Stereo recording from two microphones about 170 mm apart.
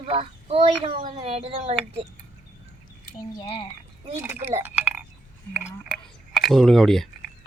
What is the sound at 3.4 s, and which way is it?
Speech, 30° left (ahead or behind).